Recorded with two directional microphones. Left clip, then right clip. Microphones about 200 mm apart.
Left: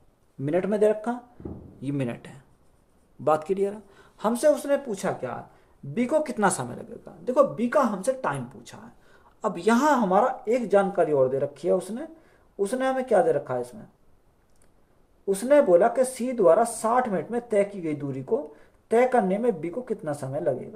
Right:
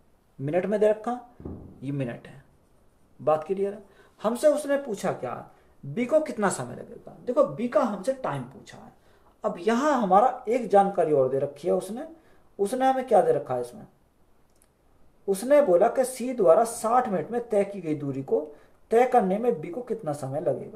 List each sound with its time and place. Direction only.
0.4 s speech: 35° left (ahead or behind)
15.3 s speech: 30° left (ahead or behind)